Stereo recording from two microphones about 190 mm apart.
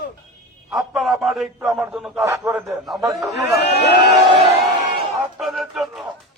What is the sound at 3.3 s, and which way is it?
Speech, 60° left (ahead or behind).